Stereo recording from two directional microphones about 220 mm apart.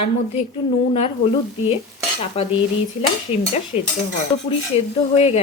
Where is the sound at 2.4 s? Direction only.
30° left (ahead or behind).